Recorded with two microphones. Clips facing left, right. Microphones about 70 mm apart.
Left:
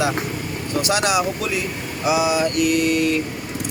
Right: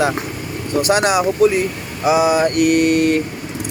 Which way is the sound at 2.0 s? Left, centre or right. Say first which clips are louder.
Right 5 dB; right.